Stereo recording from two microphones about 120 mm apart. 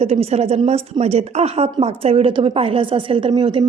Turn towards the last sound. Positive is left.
turn(degrees=-45)  # may be behind; listen again after turning